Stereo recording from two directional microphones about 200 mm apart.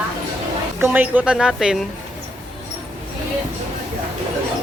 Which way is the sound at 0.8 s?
10° right (ahead or behind).